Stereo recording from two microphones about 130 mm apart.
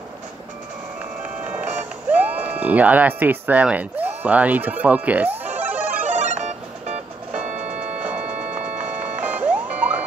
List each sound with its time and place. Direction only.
1.4 s speech: 10° right (ahead or behind)
5.4 s music: 15° right (ahead or behind)
6.0 s music: 65° right (ahead or behind)
8.0 s music: 10° right (ahead or behind)